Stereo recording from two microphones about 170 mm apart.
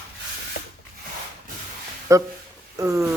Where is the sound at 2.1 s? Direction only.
20° right (ahead or behind).